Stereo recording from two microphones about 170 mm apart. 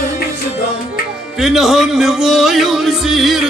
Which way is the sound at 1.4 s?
Centre (ahead or behind).